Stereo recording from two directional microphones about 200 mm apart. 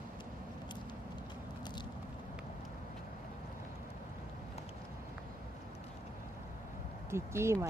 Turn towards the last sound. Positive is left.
turn(degrees=-15)  # may be behind; listen again after turning